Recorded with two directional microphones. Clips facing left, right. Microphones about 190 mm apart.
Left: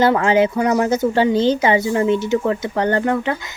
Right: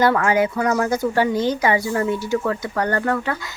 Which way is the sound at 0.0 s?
25° left (ahead or behind).